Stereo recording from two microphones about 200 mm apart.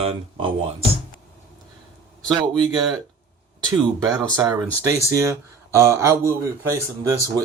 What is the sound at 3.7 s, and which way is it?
Speech, 20° right (ahead or behind).